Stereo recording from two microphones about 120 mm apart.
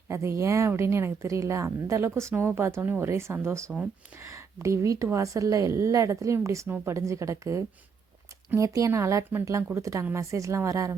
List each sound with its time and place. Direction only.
0.1 s a woman's voice: 25° right (ahead or behind)